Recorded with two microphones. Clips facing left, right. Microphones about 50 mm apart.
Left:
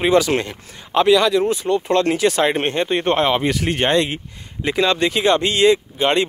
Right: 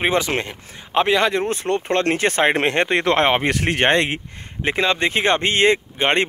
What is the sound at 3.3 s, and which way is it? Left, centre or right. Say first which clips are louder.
Speech: even; right.